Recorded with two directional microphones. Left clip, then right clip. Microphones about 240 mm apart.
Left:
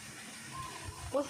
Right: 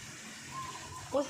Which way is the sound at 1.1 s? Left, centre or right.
Centre.